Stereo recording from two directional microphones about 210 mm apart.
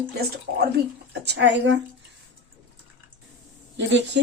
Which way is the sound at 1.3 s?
55° right (ahead or behind).